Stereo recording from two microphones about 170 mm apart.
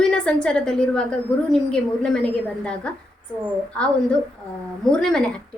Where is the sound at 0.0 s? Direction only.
5° left (ahead or behind).